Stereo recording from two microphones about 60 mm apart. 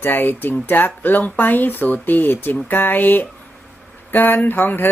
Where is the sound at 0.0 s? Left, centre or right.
Left.